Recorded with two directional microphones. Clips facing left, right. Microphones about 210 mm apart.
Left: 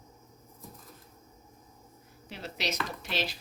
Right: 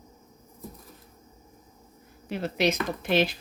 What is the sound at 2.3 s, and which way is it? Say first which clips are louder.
Speech: right 11 dB; 55° right (ahead or behind).